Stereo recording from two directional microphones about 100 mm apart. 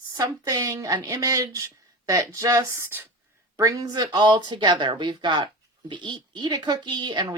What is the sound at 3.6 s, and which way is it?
A woman's voice, 35° right (ahead or behind).